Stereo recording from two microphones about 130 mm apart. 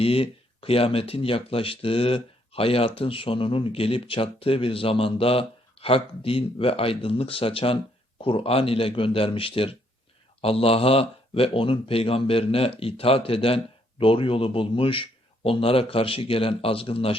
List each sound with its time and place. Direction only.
0.0 s speech: 45° left (ahead or behind)